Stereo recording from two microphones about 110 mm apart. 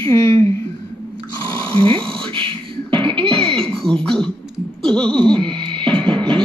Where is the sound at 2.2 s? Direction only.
50° right (ahead or behind).